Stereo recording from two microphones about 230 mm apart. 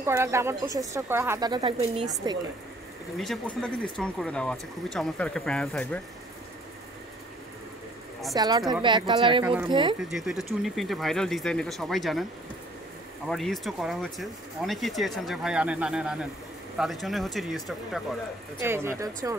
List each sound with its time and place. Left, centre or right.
0.0 s speech: centre
3.2 s speech: centre
8.4 s speech: centre
9.9 s speech: centre
13.3 s speech: centre
18.6 s speech: centre